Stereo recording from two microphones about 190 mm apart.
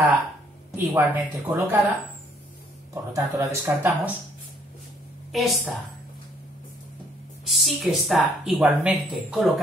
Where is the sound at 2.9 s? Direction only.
15° right (ahead or behind).